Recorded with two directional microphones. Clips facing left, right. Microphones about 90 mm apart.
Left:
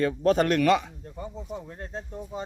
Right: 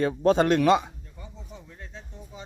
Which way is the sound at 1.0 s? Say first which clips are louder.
Left 9 dB; 45° left (ahead or behind).